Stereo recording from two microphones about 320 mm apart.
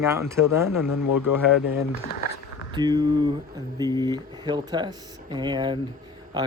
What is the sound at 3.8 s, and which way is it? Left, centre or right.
Speech, centre.